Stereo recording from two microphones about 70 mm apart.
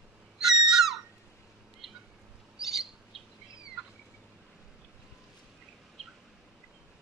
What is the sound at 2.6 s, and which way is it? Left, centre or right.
Bird, centre.